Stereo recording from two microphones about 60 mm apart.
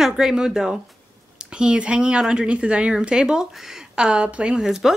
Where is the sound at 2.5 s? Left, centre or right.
Centre.